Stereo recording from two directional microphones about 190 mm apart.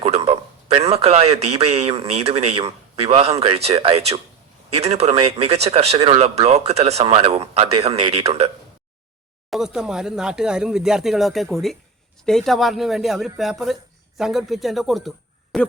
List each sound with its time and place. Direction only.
0.0 s a man's voice: 30° right (ahead or behind)
9.5 s speech: centre (ahead or behind)